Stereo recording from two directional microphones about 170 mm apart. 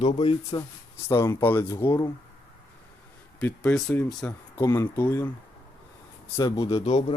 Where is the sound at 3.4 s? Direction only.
5° left (ahead or behind).